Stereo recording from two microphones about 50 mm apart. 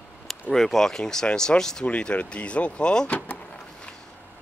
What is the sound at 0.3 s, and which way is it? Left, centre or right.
Speech, centre.